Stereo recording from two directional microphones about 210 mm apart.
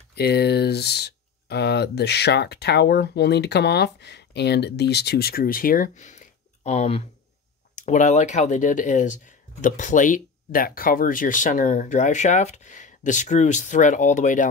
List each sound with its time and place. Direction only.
0.1 s speech: 50° left (ahead or behind)